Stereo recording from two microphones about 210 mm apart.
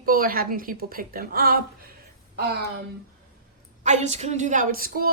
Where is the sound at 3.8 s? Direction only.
35° right (ahead or behind).